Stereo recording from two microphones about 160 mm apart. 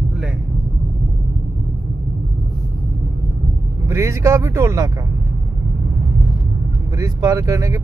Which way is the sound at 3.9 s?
20° right (ahead or behind).